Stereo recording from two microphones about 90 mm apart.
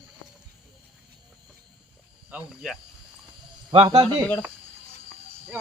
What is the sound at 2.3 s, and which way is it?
Speech, 5° right (ahead or behind).